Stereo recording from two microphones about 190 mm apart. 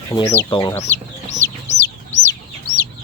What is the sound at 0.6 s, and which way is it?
Speech, 15° left (ahead or behind).